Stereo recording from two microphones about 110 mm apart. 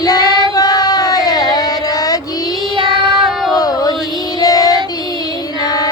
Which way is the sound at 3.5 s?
35° left (ahead or behind).